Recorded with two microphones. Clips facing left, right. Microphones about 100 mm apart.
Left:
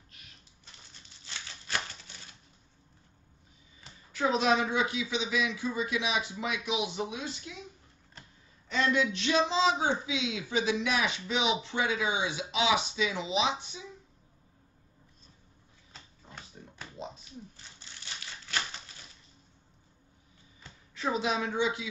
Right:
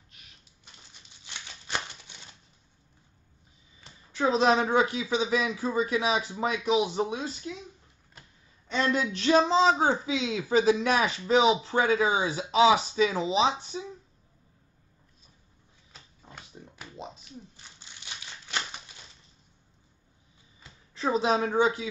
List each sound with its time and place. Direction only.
0.9 s a sound: 15° right (ahead or behind)
4.1 s speech: 30° right (ahead or behind)
8.6 s speech: 30° right (ahead or behind)
15.9 s pig: 5° right (ahead or behind)
20.9 s speech: 35° right (ahead or behind)